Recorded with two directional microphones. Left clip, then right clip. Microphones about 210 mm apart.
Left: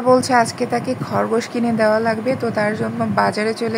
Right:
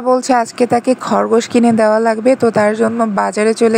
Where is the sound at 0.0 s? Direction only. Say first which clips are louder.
Right 1 dB; 25° right (ahead or behind).